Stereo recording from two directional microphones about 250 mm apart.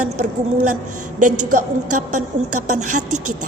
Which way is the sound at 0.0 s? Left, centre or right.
Right.